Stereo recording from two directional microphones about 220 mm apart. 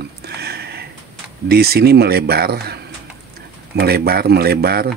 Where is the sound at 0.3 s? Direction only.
45° right (ahead or behind).